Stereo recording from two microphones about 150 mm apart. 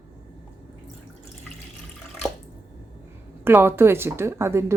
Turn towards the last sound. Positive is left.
turn(degrees=-15)  # may be behind; listen again after turning